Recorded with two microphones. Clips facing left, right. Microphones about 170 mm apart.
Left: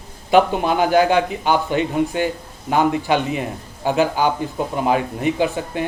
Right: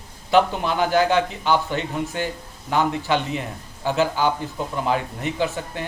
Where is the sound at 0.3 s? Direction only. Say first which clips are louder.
Left 3 dB; 15° left (ahead or behind).